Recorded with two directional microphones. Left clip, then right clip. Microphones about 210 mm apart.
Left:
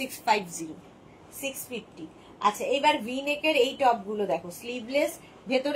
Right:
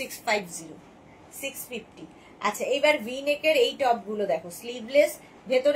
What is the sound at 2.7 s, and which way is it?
A woman's voice, 10° right (ahead or behind).